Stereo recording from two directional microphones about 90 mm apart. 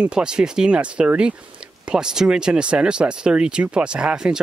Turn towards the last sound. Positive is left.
turn(degrees=-10)  # may be behind; listen again after turning